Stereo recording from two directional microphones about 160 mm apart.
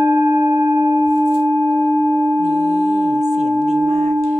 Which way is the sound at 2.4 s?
45° right (ahead or behind).